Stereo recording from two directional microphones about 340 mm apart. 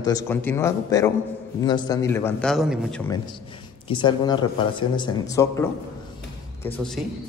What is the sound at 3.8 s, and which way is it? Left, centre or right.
A man's voice, centre.